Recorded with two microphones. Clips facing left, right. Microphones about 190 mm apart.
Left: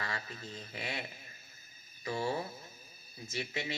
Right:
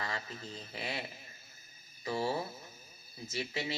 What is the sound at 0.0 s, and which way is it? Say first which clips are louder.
Speech: right 1 dB; 25° right (ahead or behind).